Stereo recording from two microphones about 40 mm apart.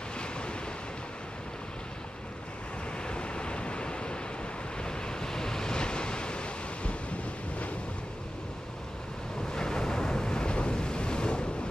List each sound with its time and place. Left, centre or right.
0.2 s waves: left
3.1 s waves: left
9.5 s waves: centre